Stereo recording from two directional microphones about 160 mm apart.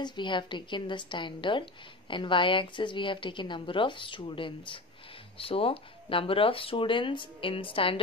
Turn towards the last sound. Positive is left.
turn(degrees=35)  # may be behind; listen again after turning